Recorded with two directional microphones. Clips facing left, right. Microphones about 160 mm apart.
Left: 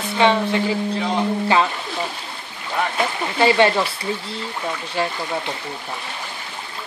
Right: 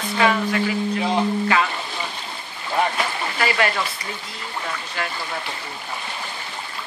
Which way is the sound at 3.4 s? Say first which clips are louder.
Left 7 dB; 25° left (ahead or behind).